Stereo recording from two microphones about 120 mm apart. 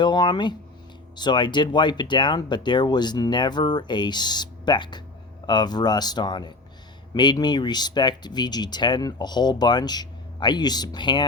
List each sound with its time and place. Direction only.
0.0 s speech: 40° left (ahead or behind)